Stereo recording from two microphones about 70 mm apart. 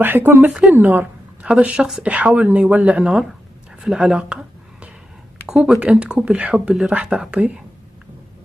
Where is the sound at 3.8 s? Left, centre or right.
Centre.